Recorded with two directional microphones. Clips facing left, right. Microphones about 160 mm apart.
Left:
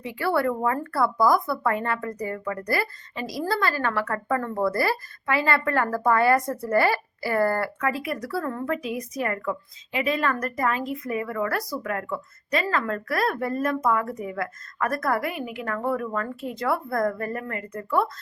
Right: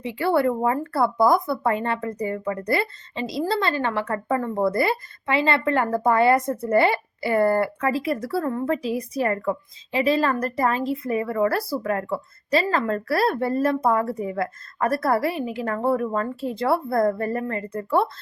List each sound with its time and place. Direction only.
0.0 s speech: 25° right (ahead or behind)